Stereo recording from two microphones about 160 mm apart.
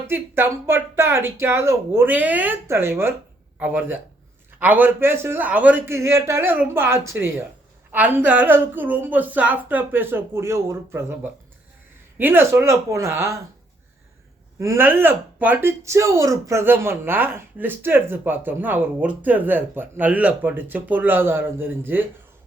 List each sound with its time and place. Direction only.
0.1 s speech: 15° right (ahead or behind)
14.6 s speech: 15° right (ahead or behind)